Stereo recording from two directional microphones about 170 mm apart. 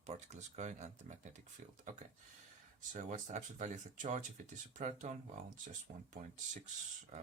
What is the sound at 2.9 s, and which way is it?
Speech, 45° right (ahead or behind).